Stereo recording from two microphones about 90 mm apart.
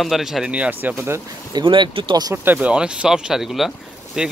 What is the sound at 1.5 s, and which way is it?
Speech, 65° right (ahead or behind).